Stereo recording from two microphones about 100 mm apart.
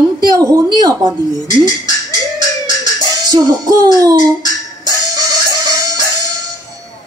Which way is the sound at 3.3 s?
45° right (ahead or behind).